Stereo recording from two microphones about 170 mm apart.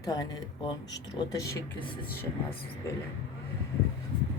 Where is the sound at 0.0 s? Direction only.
20° left (ahead or behind).